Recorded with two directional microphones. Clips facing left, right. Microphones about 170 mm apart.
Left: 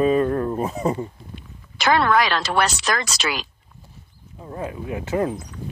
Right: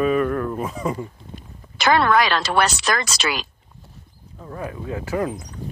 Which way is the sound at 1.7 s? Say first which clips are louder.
Right 1 dB; 65° right (ahead or behind).